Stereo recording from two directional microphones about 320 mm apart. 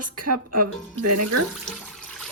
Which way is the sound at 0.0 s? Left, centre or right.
Right.